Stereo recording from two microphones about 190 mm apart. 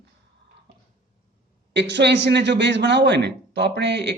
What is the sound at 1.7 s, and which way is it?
Speech, 65° right (ahead or behind).